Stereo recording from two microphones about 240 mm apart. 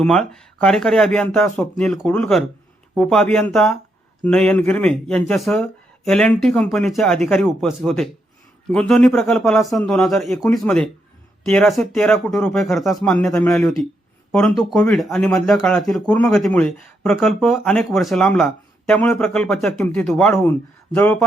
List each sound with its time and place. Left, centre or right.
0.0 s speech: centre